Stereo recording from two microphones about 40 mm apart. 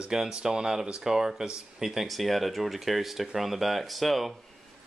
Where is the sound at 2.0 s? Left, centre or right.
Centre.